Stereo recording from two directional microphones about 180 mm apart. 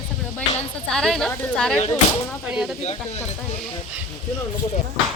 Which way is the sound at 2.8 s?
35° left (ahead or behind).